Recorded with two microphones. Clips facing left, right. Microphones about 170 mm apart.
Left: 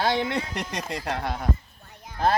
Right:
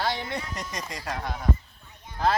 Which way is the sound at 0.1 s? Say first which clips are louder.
Left 6 dB; 70° left (ahead or behind).